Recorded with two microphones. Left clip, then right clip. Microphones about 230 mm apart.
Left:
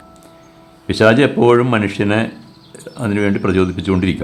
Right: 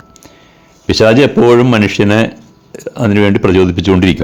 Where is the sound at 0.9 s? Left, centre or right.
Right.